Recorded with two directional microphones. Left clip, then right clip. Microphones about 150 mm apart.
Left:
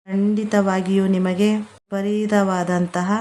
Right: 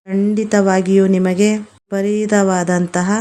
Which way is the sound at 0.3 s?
25° right (ahead or behind).